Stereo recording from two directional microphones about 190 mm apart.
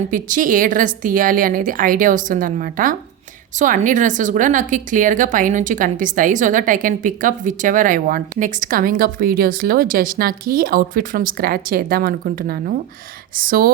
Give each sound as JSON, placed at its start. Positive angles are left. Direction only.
{"t": 0.1, "sound": "a woman's voice", "side_deg": -45}